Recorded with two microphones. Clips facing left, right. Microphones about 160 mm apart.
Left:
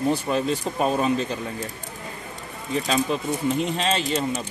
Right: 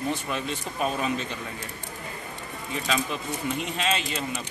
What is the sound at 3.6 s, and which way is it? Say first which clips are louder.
Speech: left 4 dB; 35° left (ahead or behind).